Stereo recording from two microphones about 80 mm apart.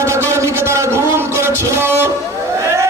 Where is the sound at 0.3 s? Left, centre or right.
Right.